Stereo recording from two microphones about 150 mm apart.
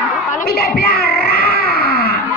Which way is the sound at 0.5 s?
90° left.